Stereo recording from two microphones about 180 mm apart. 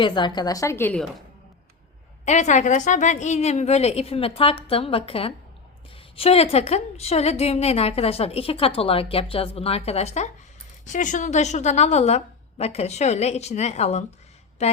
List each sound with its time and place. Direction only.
0.0 s a woman's voice: 25° left (ahead or behind)
2.2 s a woman's voice: 40° left (ahead or behind)